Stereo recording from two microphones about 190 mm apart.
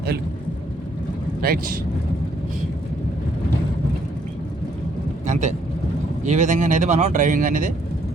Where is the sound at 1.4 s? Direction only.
55° right (ahead or behind).